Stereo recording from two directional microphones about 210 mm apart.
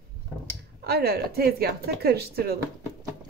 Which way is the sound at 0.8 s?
50° right (ahead or behind).